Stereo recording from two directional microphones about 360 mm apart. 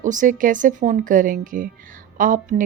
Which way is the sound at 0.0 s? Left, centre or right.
Right.